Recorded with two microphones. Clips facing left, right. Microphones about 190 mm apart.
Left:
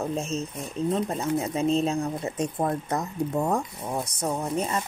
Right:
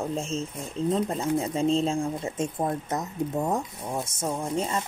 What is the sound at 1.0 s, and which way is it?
Speech, 30° right (ahead or behind).